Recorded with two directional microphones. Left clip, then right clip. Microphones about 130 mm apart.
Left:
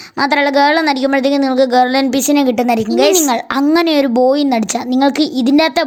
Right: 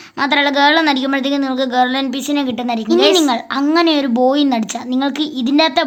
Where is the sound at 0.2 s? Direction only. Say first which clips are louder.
Left 2 dB; 45° left (ahead or behind).